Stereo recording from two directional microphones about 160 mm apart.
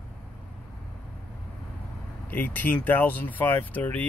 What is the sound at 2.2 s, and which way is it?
Speech, 10° left (ahead or behind).